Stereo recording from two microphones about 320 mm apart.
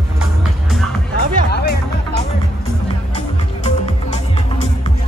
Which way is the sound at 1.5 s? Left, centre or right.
Left.